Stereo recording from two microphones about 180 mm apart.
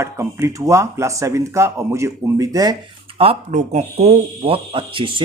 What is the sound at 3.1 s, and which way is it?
Speech, 35° right (ahead or behind).